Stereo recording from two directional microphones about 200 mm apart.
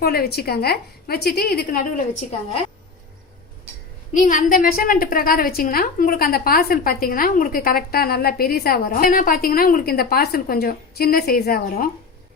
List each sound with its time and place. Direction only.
0.0 s a woman's voice: 50° left (ahead or behind)
4.1 s a woman's voice: 40° left (ahead or behind)